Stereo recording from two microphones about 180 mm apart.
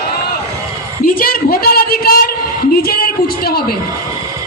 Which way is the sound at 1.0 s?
50° left (ahead or behind).